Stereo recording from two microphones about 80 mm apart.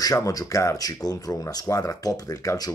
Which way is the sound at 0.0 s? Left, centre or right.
Left.